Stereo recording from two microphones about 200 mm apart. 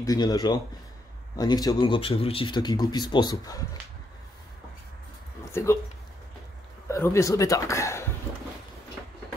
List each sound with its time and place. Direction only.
0.0 s speech: 20° left (ahead or behind)
5.5 s speech: 15° left (ahead or behind)
6.9 s speech: 15° left (ahead or behind)